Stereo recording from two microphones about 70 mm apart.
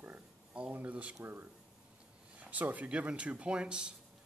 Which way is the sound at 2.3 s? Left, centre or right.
Right.